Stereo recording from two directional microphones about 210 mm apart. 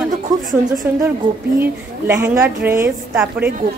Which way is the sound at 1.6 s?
10° right (ahead or behind).